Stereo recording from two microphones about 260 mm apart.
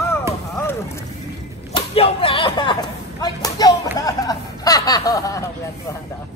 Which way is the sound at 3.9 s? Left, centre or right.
Centre.